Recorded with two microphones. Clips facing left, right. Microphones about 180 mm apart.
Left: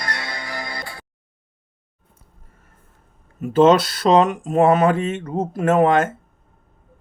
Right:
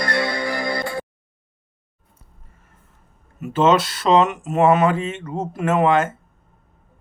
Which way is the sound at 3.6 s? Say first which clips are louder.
Left 3 dB; 40° left (ahead or behind).